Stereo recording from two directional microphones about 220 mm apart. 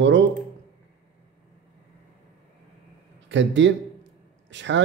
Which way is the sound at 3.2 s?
55° right (ahead or behind).